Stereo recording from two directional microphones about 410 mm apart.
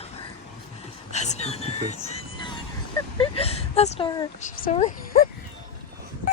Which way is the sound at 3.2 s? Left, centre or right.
Centre.